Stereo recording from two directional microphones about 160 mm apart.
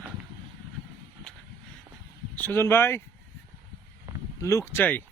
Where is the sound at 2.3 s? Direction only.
10° left (ahead or behind).